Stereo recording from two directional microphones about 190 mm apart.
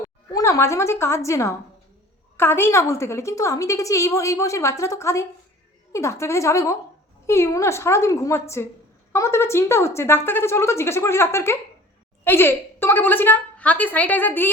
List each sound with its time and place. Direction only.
0.3 s a woman's voice: 15° left (ahead or behind)